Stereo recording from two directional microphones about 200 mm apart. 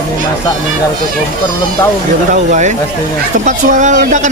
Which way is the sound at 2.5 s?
35° right (ahead or behind).